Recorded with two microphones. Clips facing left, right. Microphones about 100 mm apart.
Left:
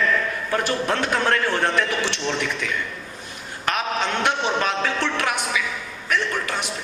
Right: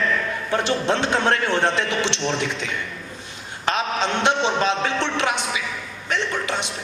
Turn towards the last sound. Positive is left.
turn(degrees=-25)  # may be behind; listen again after turning